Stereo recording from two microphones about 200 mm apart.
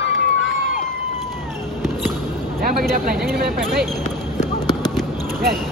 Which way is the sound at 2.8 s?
50° right (ahead or behind).